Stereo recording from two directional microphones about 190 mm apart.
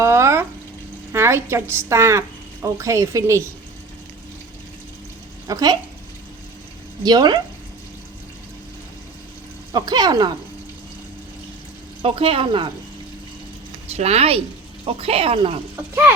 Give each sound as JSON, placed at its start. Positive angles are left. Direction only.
{"t": 0.0, "sound": "a sound", "side_deg": -15}
{"t": 1.1, "sound": "a woman's voice", "side_deg": -15}
{"t": 5.5, "sound": "speech", "side_deg": -20}
{"t": 7.0, "sound": "speech", "side_deg": -20}
{"t": 9.7, "sound": "speech", "side_deg": -20}
{"t": 12.0, "sound": "speech", "side_deg": -30}
{"t": 13.9, "sound": "speech", "side_deg": -35}
{"t": 15.7, "sound": "speech", "side_deg": -10}